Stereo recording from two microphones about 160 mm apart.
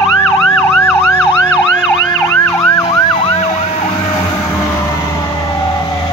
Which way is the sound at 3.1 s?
35° left (ahead or behind).